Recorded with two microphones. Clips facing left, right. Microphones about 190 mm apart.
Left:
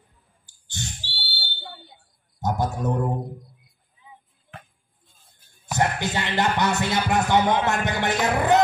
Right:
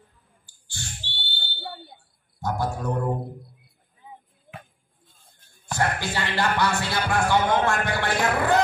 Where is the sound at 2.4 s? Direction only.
20° left (ahead or behind).